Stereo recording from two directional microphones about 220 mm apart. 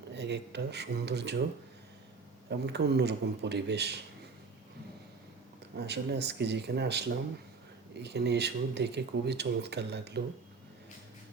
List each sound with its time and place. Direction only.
0.1 s speech: 50° right (ahead or behind)
2.5 s speech: 50° right (ahead or behind)
5.7 s speech: 50° right (ahead or behind)